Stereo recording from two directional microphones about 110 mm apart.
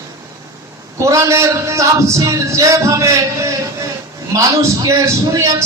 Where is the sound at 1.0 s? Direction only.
25° right (ahead or behind).